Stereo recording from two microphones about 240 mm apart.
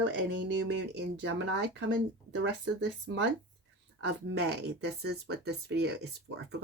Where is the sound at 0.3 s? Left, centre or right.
Right.